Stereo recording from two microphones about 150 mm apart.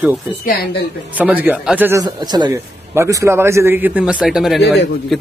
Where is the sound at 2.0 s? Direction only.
30° right (ahead or behind); by 4.6 s centre (ahead or behind).